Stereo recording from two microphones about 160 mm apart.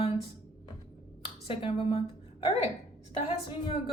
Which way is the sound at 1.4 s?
35° left (ahead or behind).